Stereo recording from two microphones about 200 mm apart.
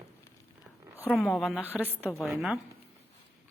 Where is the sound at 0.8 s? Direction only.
10° right (ahead or behind).